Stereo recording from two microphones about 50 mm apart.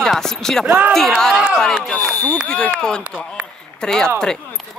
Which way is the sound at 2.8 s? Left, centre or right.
Centre.